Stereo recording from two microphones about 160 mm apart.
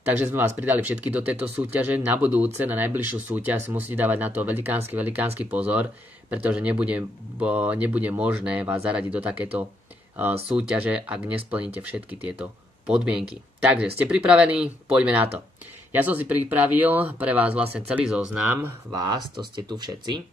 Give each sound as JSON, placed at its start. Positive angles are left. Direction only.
{"t": 0.2, "sound": "speech", "side_deg": -15}
{"t": 10.8, "sound": "speech", "side_deg": -10}
{"t": 18.9, "sound": "speech", "side_deg": -25}